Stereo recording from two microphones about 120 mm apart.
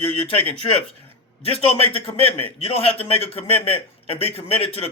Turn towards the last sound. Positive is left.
turn(degrees=55)  # may be behind; listen again after turning